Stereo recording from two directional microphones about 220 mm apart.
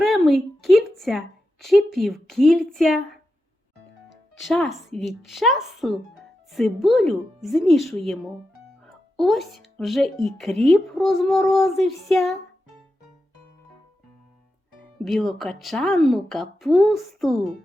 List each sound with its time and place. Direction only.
0.0 s a sound: centre (ahead or behind)
1.6 s speech: centre (ahead or behind)
4.4 s speech: centre (ahead or behind)
14.9 s speech: centre (ahead or behind)